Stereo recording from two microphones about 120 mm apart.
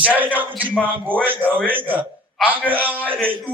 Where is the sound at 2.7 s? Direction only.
15° right (ahead or behind).